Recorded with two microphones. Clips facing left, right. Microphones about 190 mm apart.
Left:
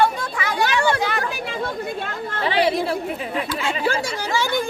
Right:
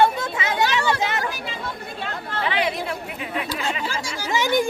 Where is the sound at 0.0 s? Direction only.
25° right (ahead or behind).